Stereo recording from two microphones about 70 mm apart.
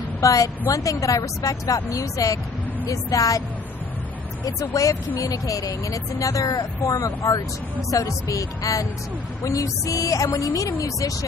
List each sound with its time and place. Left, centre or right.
0.2 s a woman's voice: left
4.5 s a woman's voice: left